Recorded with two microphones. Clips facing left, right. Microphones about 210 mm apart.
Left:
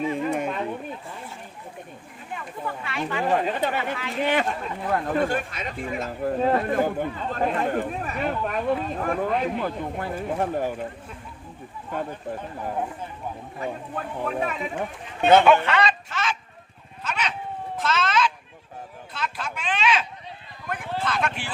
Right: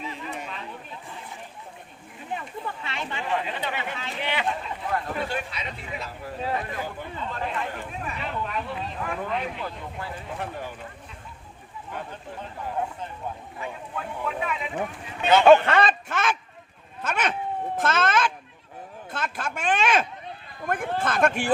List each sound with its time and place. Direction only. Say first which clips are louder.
0.0 s a sound: left 10 dB; 50° left (ahead or behind)
2.3 s a sound: left 1 dB; 25° right (ahead or behind)
3.2 s speech: left 6 dB; 45° left (ahead or behind)
13.6 s speech: left 5 dB; 40° left (ahead or behind)
15.2 s speech: left 4 dB; 55° left (ahead or behind)
15.4 s speech: right 3 dB; 50° right (ahead or behind)